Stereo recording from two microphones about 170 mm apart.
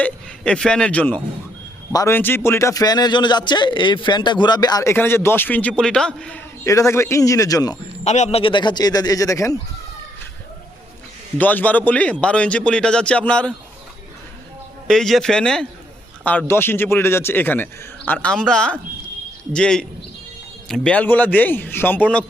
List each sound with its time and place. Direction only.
0.0 s speech: 5° left (ahead or behind)
6.7 s speech: 20° left (ahead or behind)
8.0 s speech: 40° left (ahead or behind); by 9.6 s 20° left (ahead or behind)
11.3 s speech: 10° left (ahead or behind)
14.8 s speech: centre (ahead or behind)